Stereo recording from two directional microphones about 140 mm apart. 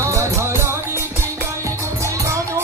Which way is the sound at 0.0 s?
20° right (ahead or behind).